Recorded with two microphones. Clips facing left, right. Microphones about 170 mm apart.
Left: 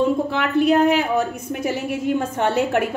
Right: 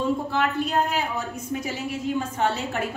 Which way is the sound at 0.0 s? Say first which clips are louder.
Left 4 dB; 70° left (ahead or behind).